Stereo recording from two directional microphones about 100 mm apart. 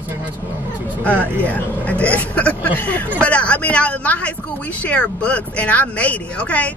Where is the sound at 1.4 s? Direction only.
15° left (ahead or behind).